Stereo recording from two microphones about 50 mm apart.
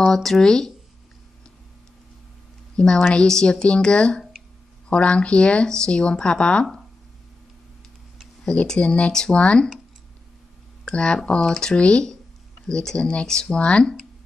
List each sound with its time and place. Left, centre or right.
0.0 s speech: centre
2.7 s speech: centre
8.5 s speech: centre
10.9 s speech: centre